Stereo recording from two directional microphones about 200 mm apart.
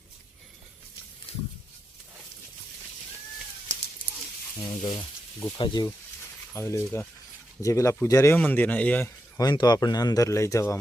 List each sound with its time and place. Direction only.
1.3 s pig: 30° left (ahead or behind)
4.5 s speech: 20° left (ahead or behind)